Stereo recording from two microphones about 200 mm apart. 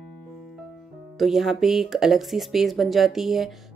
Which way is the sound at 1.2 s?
Centre (ahead or behind).